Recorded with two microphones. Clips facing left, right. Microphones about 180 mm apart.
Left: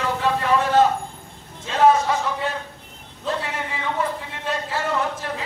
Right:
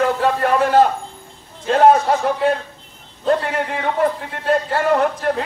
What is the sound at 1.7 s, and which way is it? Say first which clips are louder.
A man's voice: right 4 dB; 55° right (ahead or behind).